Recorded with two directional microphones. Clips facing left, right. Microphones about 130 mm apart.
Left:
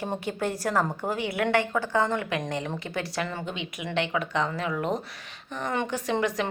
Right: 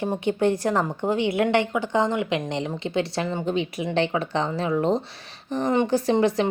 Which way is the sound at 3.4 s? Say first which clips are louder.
Right 9 dB; 40° right (ahead or behind).